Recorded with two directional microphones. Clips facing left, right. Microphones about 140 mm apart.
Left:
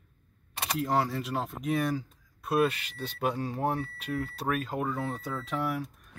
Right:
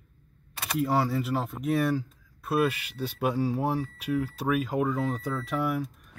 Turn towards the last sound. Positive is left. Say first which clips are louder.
# right 3 dB
turn(degrees=-10)  # may be behind; listen again after turning